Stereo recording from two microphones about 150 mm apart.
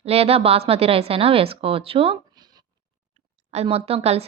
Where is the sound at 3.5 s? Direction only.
45° right (ahead or behind).